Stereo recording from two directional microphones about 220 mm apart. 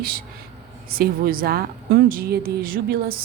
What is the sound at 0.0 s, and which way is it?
Speech, 40° right (ahead or behind).